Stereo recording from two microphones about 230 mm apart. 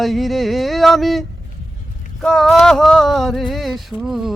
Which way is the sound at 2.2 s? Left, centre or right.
Centre.